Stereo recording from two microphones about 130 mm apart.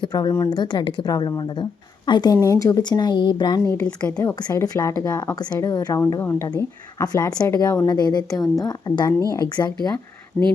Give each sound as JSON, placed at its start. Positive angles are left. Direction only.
{"t": 0.0, "sound": "a woman's voice", "side_deg": 30}
{"t": 3.7, "sound": "a woman's voice", "side_deg": 20}
{"t": 4.4, "sound": "speech", "side_deg": 30}
{"t": 6.1, "sound": "a woman's voice", "side_deg": 20}